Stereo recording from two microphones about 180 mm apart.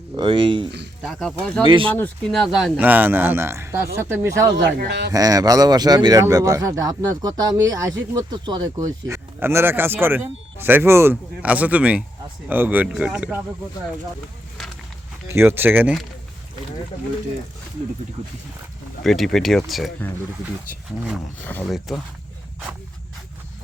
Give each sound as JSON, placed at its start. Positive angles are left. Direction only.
{"t": 0.2, "sound": "speech", "side_deg": -30}
{"t": 1.0, "sound": "speech", "side_deg": 5}
{"t": 1.6, "sound": "speech", "side_deg": -30}
{"t": 1.9, "sound": "speech", "side_deg": 5}
{"t": 4.5, "sound": "speech", "side_deg": -70}
{"t": 5.1, "sound": "speech", "side_deg": -20}
{"t": 14.6, "sound": "a sound", "side_deg": 0}
{"t": 15.3, "sound": "speech", "side_deg": -15}
{"t": 19.0, "sound": "speech", "side_deg": 0}
{"t": 21.7, "sound": "speech", "side_deg": 0}